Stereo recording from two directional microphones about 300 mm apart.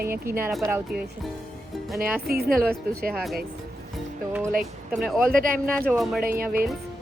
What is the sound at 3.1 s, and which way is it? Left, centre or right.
Speech, centre.